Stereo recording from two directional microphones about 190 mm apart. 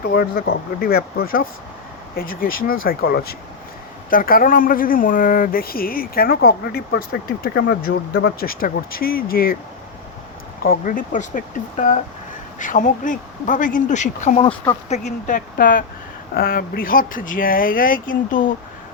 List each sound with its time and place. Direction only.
0.0 s speech: 50° left (ahead or behind)
10.6 s speech: 45° left (ahead or behind)